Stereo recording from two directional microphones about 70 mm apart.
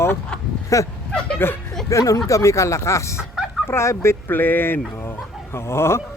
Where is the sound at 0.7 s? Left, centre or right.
Left.